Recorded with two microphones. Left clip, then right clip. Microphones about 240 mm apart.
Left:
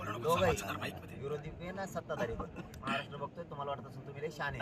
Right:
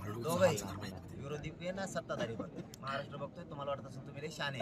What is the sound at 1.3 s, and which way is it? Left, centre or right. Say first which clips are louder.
Speech: right 2 dB; right.